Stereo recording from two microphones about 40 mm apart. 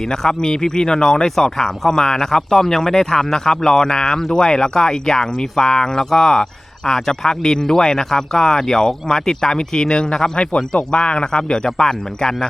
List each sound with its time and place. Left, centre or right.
0.0 s speech: centre
10.3 s speech: left